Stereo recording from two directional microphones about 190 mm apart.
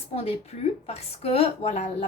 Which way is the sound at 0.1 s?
35° left (ahead or behind).